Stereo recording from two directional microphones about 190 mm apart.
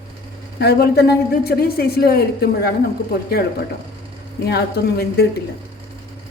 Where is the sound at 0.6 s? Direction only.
55° left (ahead or behind).